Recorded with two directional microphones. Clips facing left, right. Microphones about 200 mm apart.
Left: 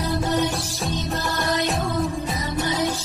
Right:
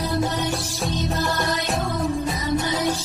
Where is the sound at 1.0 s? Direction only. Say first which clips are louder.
Right 3 dB; centre (ahead or behind).